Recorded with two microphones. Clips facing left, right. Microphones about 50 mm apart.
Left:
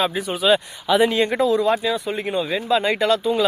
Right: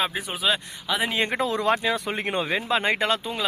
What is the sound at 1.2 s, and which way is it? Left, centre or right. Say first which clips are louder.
Speech: left 6 dB; right.